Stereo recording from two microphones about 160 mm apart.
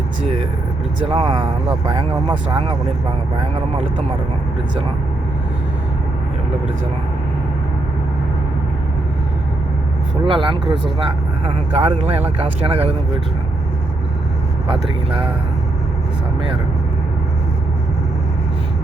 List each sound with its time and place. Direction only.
1.0 s speech: 35° right (ahead or behind)
10.2 s speech: 35° right (ahead or behind)
14.7 s speech: 35° right (ahead or behind)